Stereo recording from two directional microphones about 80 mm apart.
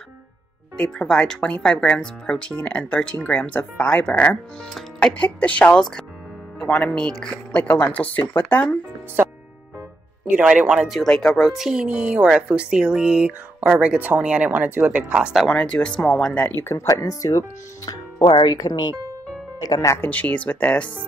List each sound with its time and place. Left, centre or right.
0.7 s speech: centre
7.5 s speech: left
10.4 s speech: centre
11.0 s speech: centre
15.3 s speech: centre
16.4 s speech: left
16.8 s speech: left
20.0 s speech: centre